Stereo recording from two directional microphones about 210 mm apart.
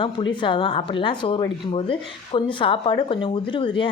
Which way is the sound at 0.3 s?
25° left (ahead or behind).